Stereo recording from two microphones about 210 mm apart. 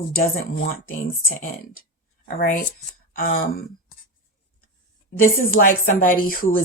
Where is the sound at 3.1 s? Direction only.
40° left (ahead or behind).